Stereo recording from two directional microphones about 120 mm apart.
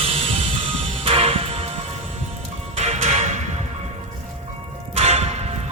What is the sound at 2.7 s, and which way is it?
Music, 70° right (ahead or behind).